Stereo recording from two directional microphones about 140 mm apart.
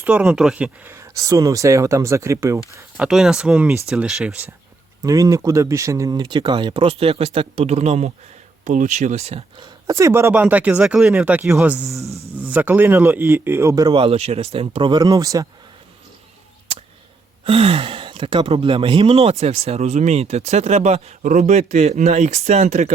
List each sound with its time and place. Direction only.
0.0 s speech: 10° right (ahead or behind)
0.9 s speech: 20° right (ahead or behind)
3.0 s speech: 5° right (ahead or behind)
5.0 s speech: 25° right (ahead or behind); by 9.6 s 45° right (ahead or behind)
9.8 s speech: 20° right (ahead or behind)
13.9 s speech: 45° right (ahead or behind); by 15.4 s 25° right (ahead or behind)
17.4 s speech: 45° right (ahead or behind)